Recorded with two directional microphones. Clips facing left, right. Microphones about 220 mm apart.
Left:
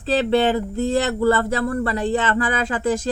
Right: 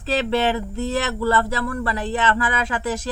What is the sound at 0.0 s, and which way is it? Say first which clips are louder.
A woman's voice: left 3 dB; 30° left (ahead or behind).